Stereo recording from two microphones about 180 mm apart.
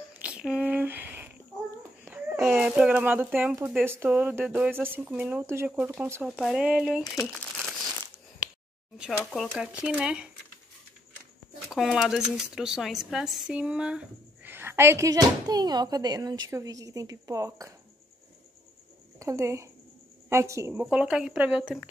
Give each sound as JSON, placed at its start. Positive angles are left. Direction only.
{"t": 0.2, "sound": "a sound", "side_deg": -5}
{"t": 1.8, "sound": "a child's voice", "side_deg": -10}
{"t": 7.3, "sound": "crumpling", "side_deg": 0}
{"t": 8.9, "sound": "speech", "side_deg": 0}
{"t": 11.7, "sound": "a woman's voice", "side_deg": 0}
{"t": 19.1, "sound": "a woman's voice", "side_deg": -15}